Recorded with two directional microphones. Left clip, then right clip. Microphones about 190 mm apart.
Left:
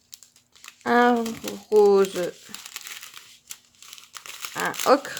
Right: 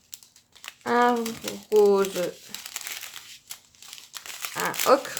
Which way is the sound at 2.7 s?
5° left (ahead or behind).